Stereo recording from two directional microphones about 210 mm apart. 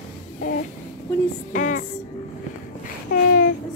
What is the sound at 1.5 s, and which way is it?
Music, 35° left (ahead or behind).